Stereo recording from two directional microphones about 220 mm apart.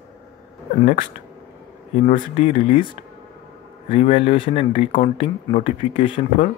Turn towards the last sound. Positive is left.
turn(degrees=25)  # may be behind; listen again after turning